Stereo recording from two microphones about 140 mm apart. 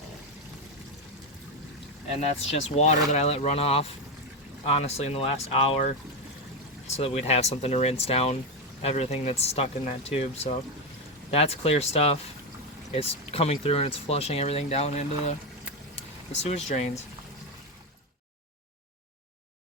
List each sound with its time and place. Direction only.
2.2 s speech: 50° left (ahead or behind)
16.4 s speech: 55° left (ahead or behind)